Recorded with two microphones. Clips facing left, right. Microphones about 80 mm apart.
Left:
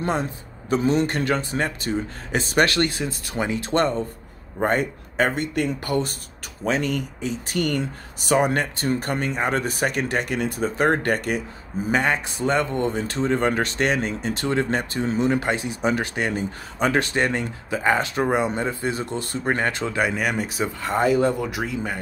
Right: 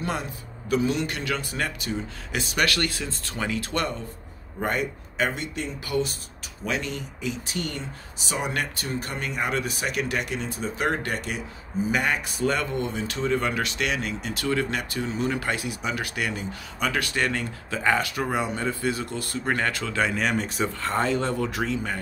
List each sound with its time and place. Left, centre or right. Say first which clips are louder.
0.7 s speech: left 4 dB; left
1.5 s speech: left 4 dB; left
1.9 s speech: left 5 dB; left
6.6 s speech: left 6 dB; left
7.5 s speech: left 8 dB; left
8.5 s speech: left 6 dB; left
10.3 s speech: left 6 dB; left
11.9 s speech: left 5 dB; left
12.7 s speech: left 5 dB; left; by 21.9 s centre